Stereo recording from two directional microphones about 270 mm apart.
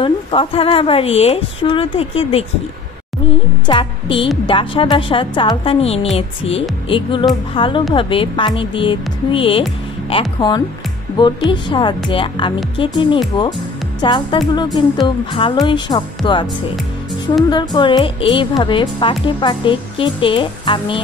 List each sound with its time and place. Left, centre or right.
0.0 s speech: centre
3.6 s speech: centre
17.5 s speech: centre